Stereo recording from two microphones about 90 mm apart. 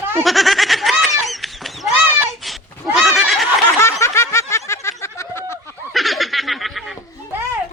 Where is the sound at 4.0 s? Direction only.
30° left (ahead or behind).